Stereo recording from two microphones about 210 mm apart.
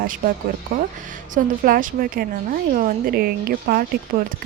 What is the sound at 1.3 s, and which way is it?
A woman's voice, 40° right (ahead or behind).